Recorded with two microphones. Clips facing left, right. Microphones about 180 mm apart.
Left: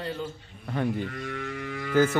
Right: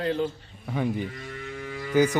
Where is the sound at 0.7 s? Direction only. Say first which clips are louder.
Right 1 dB; 5° right (ahead or behind).